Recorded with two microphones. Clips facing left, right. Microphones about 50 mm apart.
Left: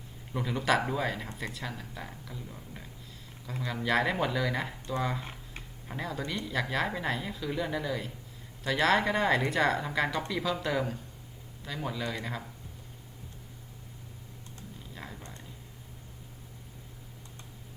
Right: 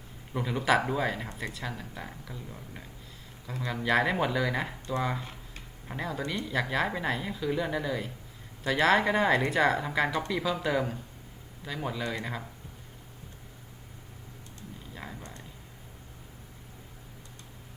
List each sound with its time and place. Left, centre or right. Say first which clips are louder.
0.3 s speech: right 2 dB; centre
5.2 s tick-tock: left 1 dB; left
5.9 s speech: right 2 dB; centre
14.9 s a sound: right 2 dB; centre